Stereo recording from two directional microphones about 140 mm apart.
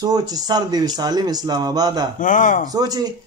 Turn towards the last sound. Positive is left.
turn(degrees=-25)  # may be behind; listen again after turning